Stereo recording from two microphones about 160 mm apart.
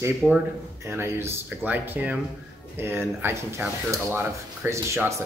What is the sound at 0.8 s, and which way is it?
Speech, 15° right (ahead or behind).